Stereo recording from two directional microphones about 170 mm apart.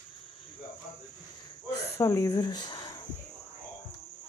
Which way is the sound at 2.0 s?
20° left (ahead or behind).